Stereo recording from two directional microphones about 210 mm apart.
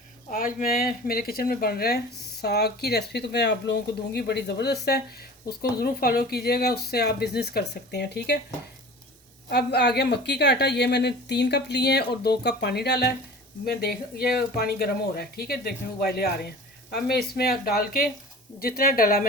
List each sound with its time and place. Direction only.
0.3 s a woman's voice: 40° left (ahead or behind)
9.5 s a woman's voice: 50° left (ahead or behind)